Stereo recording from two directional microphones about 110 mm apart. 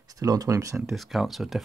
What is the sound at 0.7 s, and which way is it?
Speech, centre (ahead or behind).